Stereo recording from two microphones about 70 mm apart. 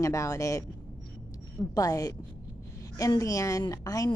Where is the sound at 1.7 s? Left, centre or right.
Left.